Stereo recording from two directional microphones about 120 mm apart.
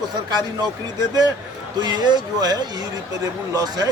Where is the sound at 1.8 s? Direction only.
35° right (ahead or behind).